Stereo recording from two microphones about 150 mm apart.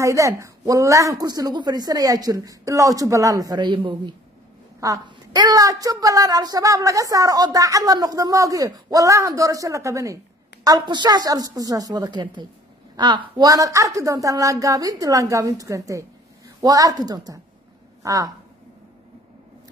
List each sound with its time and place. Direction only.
0.0 s a woman's voice: 20° right (ahead or behind)